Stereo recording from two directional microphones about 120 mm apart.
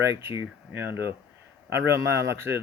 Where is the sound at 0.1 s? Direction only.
25° right (ahead or behind).